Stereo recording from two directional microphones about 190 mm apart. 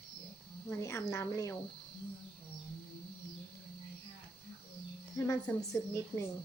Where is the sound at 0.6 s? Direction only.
15° left (ahead or behind).